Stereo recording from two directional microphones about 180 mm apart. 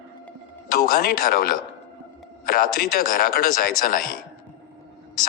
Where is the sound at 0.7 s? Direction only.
55° left (ahead or behind).